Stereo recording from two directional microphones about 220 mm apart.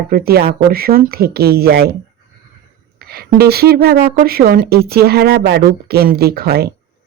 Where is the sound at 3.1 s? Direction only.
45° right (ahead or behind).